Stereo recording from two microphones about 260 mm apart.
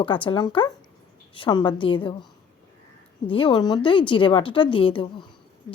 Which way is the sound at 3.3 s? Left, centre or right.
Centre.